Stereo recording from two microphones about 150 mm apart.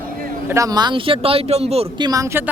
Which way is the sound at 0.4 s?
20° right (ahead or behind).